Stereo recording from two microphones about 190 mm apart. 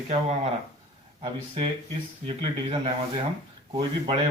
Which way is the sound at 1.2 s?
25° right (ahead or behind).